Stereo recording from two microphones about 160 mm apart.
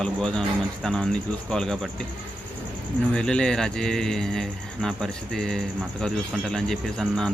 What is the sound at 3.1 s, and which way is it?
Speech, 5° left (ahead or behind).